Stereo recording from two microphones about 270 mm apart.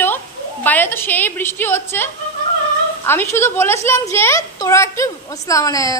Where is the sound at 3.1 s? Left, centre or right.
Centre.